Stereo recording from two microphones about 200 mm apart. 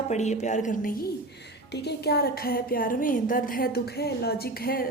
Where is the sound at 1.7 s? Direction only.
55° left (ahead or behind).